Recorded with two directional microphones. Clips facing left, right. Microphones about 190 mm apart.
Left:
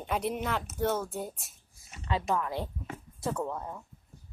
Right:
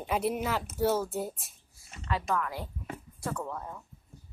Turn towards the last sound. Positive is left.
turn(degrees=20)  # may be behind; listen again after turning